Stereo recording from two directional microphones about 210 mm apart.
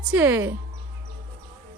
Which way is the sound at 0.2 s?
10° right (ahead or behind).